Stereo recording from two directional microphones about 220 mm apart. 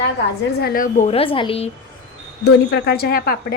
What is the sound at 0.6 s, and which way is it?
A woman's voice, 40° left (ahead or behind).